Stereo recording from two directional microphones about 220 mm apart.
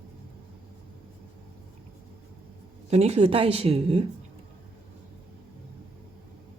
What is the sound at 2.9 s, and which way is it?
A woman's voice, 30° right (ahead or behind).